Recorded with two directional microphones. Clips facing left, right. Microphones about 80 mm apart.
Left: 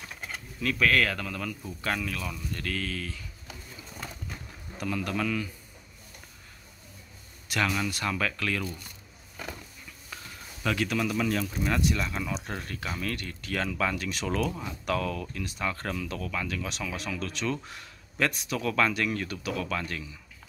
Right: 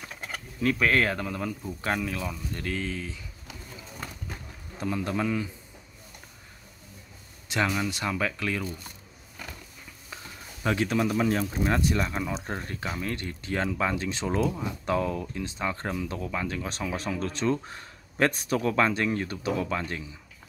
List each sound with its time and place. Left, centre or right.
0.6 s speech: right
4.7 s speech: right
7.4 s speech: right
10.0 s speech: right